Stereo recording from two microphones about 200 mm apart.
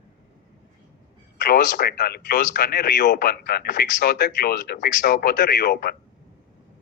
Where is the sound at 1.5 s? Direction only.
50° left (ahead or behind).